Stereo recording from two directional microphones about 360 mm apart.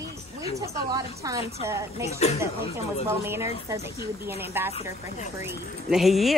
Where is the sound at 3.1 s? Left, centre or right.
Centre.